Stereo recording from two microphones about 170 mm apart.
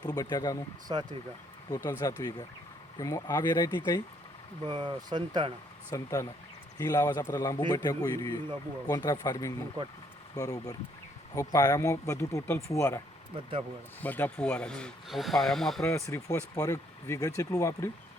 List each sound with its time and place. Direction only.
0.0 s a man's voice: 25° left (ahead or behind)
0.9 s speech: 30° right (ahead or behind)
1.7 s a man's voice: 20° left (ahead or behind)
4.6 s speech: 30° right (ahead or behind)
5.9 s a man's voice: 20° left (ahead or behind)
13.3 s speech: 35° right (ahead or behind)
14.0 s speech: 10° left (ahead or behind)
15.9 s a man's voice: 15° left (ahead or behind)